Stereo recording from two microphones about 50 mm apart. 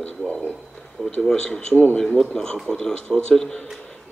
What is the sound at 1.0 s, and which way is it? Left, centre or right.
Speech, centre.